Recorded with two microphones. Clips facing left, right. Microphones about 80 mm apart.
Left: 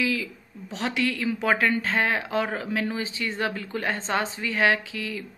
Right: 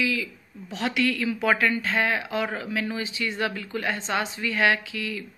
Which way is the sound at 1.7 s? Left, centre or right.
Left.